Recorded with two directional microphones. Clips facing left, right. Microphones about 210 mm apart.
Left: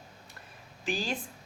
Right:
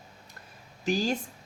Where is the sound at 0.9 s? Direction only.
40° right (ahead or behind).